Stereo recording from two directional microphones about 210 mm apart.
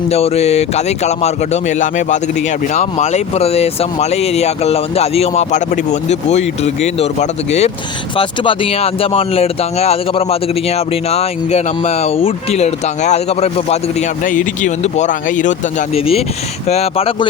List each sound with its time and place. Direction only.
0.1 s speech: 30° left (ahead or behind)